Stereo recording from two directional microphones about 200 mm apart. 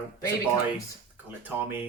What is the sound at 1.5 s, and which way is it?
Speech, 10° right (ahead or behind).